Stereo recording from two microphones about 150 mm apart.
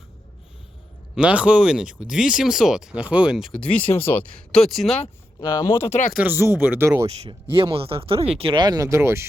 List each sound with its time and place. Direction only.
1.1 s speech: 5° right (ahead or behind)
3.6 s speech: 10° left (ahead or behind)
5.4 s speech: 20° left (ahead or behind)
6.1 s speech: 15° right (ahead or behind)
7.2 s speech: 35° right (ahead or behind); by 9.2 s 15° right (ahead or behind)